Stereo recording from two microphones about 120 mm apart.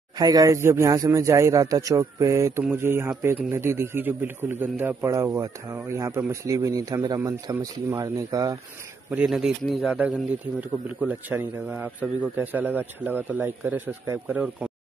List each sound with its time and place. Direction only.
0.2 s a man's voice: 30° right (ahead or behind)
9.1 s a man's voice: 5° right (ahead or behind)